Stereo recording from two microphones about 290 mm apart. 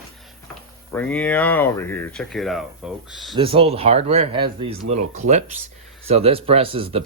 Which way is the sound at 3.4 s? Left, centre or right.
Centre.